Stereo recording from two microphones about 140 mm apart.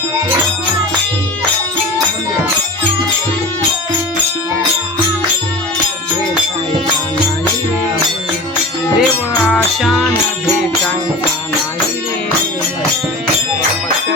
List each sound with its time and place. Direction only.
9.0 s music: 5° left (ahead or behind)